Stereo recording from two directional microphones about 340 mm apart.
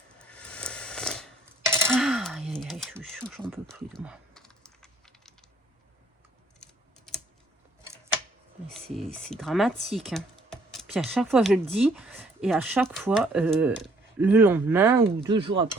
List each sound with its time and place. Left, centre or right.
0.2 s coin: centre
6.6 s typing: centre
8.7 s speech: centre